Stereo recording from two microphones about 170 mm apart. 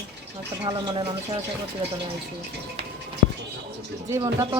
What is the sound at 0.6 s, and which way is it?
Speech, 25° right (ahead or behind).